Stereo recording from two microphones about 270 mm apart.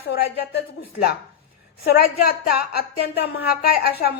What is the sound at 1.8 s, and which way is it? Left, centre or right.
A woman's voice, left.